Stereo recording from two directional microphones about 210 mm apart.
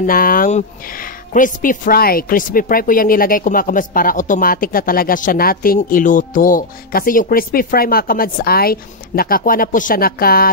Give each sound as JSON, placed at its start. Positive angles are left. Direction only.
{"t": 0.0, "sound": "speech", "side_deg": 45}